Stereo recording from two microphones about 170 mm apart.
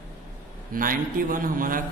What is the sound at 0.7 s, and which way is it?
Speech, 55° right (ahead or behind).